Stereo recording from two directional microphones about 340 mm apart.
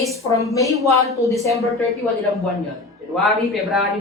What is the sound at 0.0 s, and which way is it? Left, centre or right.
Speech, centre.